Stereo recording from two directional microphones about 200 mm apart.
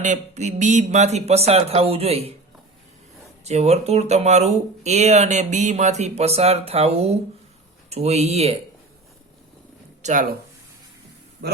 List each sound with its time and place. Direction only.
0.0 s speech: 35° right (ahead or behind)
3.4 s speech: 35° right (ahead or behind)
10.0 s speech: 40° right (ahead or behind)